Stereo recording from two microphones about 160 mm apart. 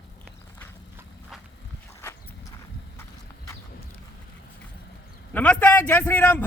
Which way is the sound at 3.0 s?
15° left (ahead or behind).